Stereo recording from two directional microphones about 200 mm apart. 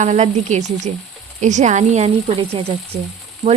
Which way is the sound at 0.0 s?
35° right (ahead or behind).